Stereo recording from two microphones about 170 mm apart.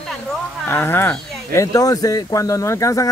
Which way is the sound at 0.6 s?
15° left (ahead or behind).